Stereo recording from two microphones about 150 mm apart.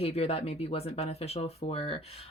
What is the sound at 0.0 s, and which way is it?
Speech, 40° left (ahead or behind).